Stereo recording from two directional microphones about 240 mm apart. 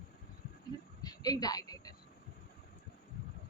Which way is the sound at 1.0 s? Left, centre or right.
Centre.